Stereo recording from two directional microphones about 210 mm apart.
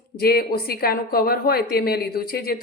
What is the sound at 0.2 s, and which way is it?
A woman's voice, 45° left (ahead or behind).